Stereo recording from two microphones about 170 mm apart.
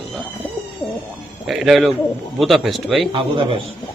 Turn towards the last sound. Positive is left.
turn(degrees=-30)  # may be behind; listen again after turning